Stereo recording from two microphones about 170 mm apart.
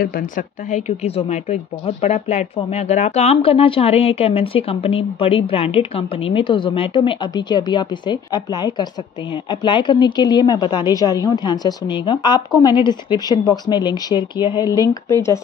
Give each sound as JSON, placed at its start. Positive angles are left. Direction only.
{"t": 0.0, "sound": "a woman's voice", "side_deg": 55}